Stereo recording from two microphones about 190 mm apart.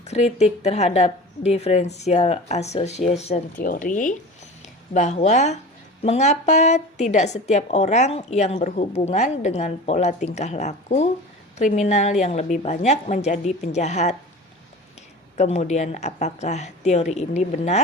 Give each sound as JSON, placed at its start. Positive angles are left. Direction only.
{"t": 0.0, "sound": "a woman's voice", "side_deg": 35}
{"t": 3.6, "sound": "a woman's voice", "side_deg": 45}
{"t": 15.4, "sound": "a woman's voice", "side_deg": 35}